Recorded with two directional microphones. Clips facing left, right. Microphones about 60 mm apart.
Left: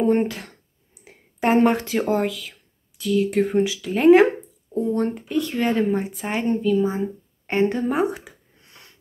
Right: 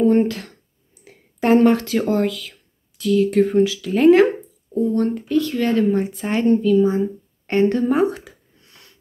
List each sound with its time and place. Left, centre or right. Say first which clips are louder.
0.0 s a woman's voice: right 4 dB; centre
5.9 s a woman's voice: right 4 dB; centre